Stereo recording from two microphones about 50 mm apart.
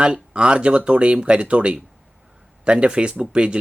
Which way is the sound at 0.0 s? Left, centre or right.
Right.